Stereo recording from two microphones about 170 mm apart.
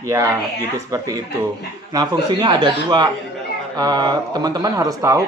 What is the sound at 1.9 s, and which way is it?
Speech, 25° right (ahead or behind).